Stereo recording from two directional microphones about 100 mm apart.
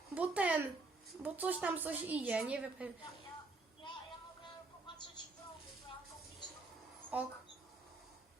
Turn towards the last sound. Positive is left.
turn(degrees=-15)  # may be behind; listen again after turning